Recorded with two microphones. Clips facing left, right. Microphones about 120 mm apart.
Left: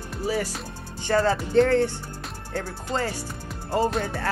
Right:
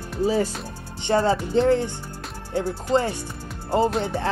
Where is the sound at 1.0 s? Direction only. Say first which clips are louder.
Right 2 dB; 20° right (ahead or behind).